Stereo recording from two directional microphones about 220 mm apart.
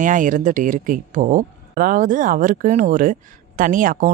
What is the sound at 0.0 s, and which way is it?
Speech, 35° right (ahead or behind).